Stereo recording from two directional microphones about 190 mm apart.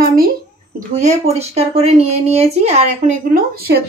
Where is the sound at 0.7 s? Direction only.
35° right (ahead or behind).